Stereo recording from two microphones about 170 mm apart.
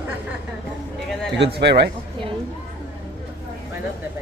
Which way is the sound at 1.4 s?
85° right.